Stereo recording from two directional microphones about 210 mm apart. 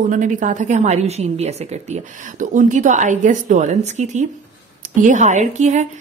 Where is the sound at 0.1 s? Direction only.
35° right (ahead or behind).